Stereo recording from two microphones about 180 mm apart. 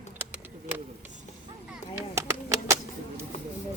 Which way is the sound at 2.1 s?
15° right (ahead or behind).